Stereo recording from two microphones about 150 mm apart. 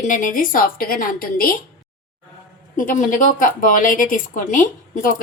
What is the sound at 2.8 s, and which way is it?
A woman's voice, 60° left (ahead or behind).